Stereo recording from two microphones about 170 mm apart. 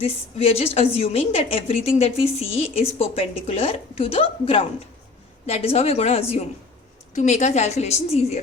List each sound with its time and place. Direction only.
0.0 s a woman's voice: 35° left (ahead or behind)